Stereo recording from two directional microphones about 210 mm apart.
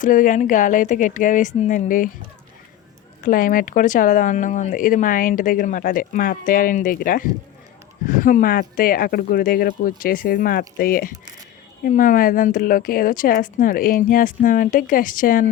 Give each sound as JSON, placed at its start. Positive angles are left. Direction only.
{"t": 0.0, "sound": "speech", "side_deg": 40}
{"t": 3.2, "sound": "speech", "side_deg": 40}